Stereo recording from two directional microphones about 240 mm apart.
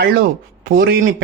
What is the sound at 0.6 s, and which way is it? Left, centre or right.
Speech, right.